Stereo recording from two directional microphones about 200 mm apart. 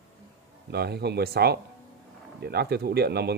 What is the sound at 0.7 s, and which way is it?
Speech, 55° right (ahead or behind).